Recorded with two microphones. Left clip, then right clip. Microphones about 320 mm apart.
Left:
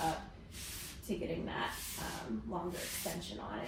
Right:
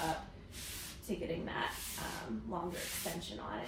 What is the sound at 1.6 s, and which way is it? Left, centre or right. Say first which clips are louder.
A woman's voice: even; centre.